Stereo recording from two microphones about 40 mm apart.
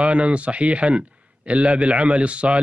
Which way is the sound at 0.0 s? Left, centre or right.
Right.